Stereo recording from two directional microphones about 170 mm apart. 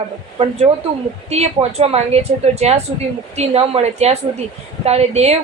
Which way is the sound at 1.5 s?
35° right (ahead or behind).